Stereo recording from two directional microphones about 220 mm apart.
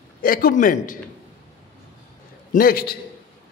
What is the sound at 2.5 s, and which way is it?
Speech, 40° left (ahead or behind).